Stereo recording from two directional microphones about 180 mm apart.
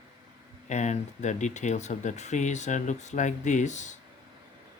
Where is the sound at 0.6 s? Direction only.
40° left (ahead or behind).